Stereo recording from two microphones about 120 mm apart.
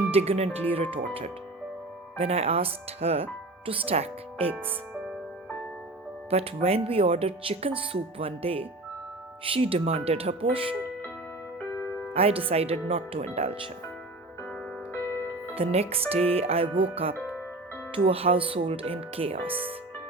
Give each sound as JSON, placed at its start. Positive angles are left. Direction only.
{"t": 0.1, "sound": "speech", "side_deg": -55}
{"t": 6.3, "sound": "speech", "side_deg": -60}
{"t": 12.1, "sound": "speech", "side_deg": -55}
{"t": 14.9, "sound": "music", "side_deg": 25}
{"t": 15.5, "sound": "speech", "side_deg": -55}